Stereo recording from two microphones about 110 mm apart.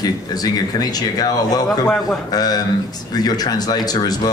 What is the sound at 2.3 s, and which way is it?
Speech, 35° left (ahead or behind).